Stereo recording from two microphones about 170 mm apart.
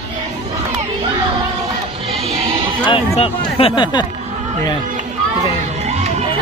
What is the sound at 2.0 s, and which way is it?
Music, 35° right (ahead or behind).